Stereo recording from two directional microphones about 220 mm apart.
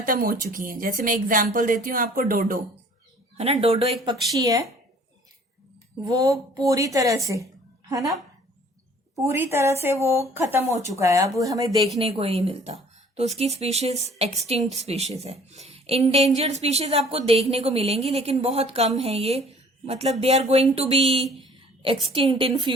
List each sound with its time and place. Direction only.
0.0 s speech: 40° right (ahead or behind)
3.3 s a woman's voice: 30° right (ahead or behind)
4.0 s speech: 15° right (ahead or behind)
6.1 s a woman's voice: 15° right (ahead or behind)
9.1 s speech: 10° right (ahead or behind)
11.9 s a woman's voice: 25° right (ahead or behind)